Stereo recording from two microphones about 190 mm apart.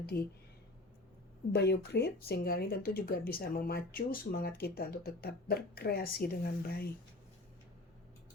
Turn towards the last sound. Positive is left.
turn(degrees=55)  # may be behind; listen again after turning